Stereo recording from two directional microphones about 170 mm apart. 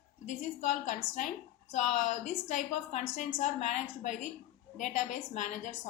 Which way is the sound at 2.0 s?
45° left (ahead or behind).